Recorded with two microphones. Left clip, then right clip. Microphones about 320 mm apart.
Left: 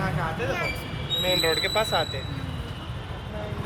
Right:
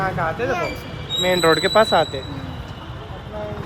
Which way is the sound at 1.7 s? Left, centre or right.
Right.